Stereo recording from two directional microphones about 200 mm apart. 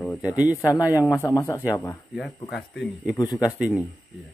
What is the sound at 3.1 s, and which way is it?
Speech, 20° left (ahead or behind).